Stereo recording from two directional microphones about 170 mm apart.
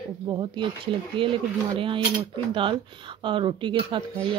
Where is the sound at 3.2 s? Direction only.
30° right (ahead or behind).